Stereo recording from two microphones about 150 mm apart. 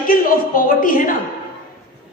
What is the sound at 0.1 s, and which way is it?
A woman's voice, 70° left (ahead or behind).